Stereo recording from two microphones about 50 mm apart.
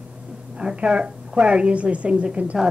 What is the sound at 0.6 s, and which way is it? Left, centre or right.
A woman's voice, centre.